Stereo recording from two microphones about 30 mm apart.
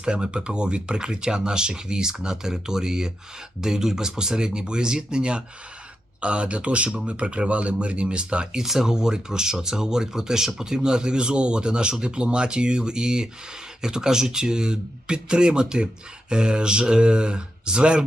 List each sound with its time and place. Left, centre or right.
0.0 s speech: right
8.6 s speech: centre
8.9 s speech: right